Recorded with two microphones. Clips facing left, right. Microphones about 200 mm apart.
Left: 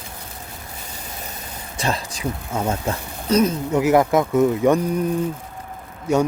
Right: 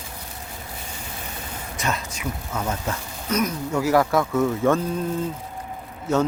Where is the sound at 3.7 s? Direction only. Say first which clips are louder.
Left 2 dB; 20° left (ahead or behind).